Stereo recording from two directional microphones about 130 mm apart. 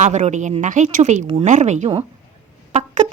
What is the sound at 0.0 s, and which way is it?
A woman's voice, 65° right (ahead or behind).